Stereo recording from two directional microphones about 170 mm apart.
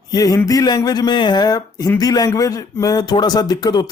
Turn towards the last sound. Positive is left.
turn(degrees=25)  # may be behind; listen again after turning